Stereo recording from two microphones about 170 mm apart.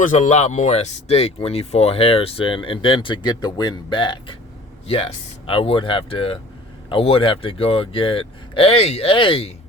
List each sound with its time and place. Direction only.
0.0 s speech: 45° left (ahead or behind)